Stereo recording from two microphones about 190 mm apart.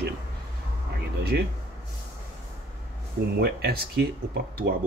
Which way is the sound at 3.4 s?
55° right (ahead or behind).